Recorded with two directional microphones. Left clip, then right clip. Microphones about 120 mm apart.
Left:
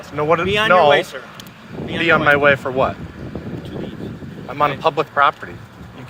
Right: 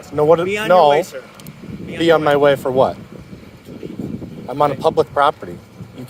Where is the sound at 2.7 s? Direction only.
45° right (ahead or behind).